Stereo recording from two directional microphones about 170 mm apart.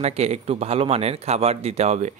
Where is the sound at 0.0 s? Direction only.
40° right (ahead or behind).